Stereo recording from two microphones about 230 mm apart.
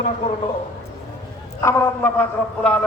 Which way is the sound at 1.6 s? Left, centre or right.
Centre.